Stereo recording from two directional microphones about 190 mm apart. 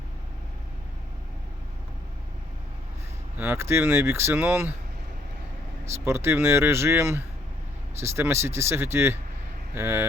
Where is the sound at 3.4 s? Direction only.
10° right (ahead or behind).